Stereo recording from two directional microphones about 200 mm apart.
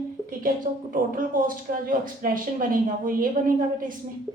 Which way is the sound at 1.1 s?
45° right (ahead or behind).